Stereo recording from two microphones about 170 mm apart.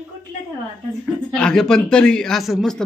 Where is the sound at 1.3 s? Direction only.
5° left (ahead or behind).